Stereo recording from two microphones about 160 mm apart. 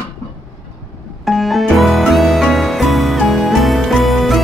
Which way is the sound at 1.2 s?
Centre (ahead or behind).